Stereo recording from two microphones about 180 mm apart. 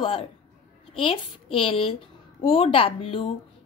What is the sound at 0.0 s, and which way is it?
Speech, 30° left (ahead or behind).